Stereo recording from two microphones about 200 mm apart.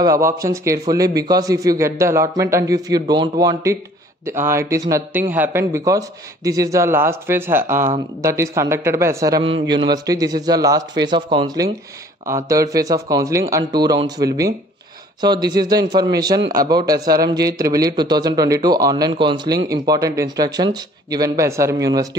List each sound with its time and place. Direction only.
0.0 s a man's voice: 15° right (ahead or behind)